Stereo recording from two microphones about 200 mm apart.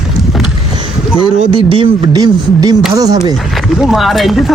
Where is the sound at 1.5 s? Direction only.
25° right (ahead or behind).